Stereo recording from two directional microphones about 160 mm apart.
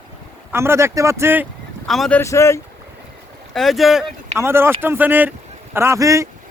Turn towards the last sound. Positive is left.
turn(degrees=-20)  # may be behind; listen again after turning